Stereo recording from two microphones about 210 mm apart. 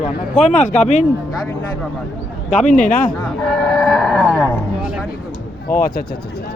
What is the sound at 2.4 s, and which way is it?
Speech, 35° left (ahead or behind).